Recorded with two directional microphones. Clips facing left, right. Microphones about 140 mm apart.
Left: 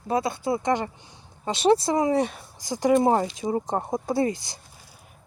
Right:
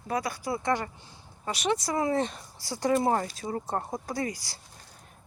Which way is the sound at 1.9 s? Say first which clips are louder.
Left 5 dB; 15° left (ahead or behind).